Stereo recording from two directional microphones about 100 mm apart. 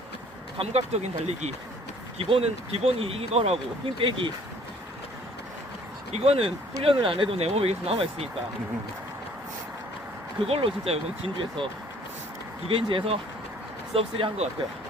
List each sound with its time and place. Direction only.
0.6 s speech: 85° right; by 4.3 s 60° right (ahead or behind)
6.1 s speech: 90° right
10.4 s speech: 75° right (ahead or behind)
12.6 s speech: 70° right (ahead or behind)